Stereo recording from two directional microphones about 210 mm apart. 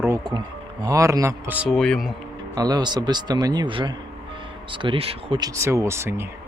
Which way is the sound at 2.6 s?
20° right (ahead or behind).